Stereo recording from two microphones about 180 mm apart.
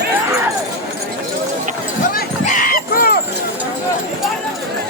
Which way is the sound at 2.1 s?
50° left (ahead or behind).